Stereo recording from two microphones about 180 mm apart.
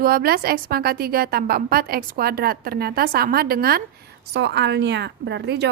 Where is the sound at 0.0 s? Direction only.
55° right (ahead or behind).